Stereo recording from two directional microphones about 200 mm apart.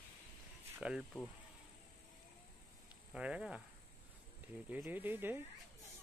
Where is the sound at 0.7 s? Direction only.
5° right (ahead or behind).